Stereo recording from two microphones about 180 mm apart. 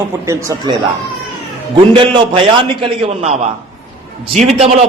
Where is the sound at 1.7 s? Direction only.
25° right (ahead or behind).